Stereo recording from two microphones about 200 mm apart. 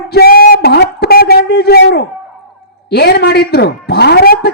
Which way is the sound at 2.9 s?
55° left (ahead or behind).